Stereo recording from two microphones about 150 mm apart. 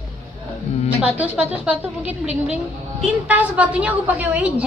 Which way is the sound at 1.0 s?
10° right (ahead or behind).